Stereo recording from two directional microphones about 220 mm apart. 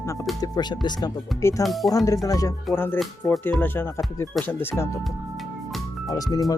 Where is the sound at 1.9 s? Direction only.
15° left (ahead or behind).